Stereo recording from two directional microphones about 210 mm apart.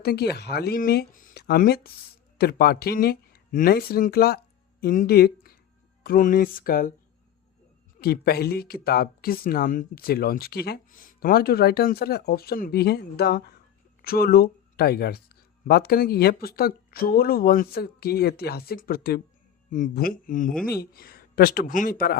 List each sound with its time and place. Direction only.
0.0 s speech: 50° left (ahead or behind)
7.9 s speech: 45° left (ahead or behind)